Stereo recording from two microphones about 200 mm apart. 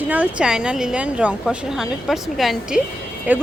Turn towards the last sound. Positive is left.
turn(degrees=-5)  # may be behind; listen again after turning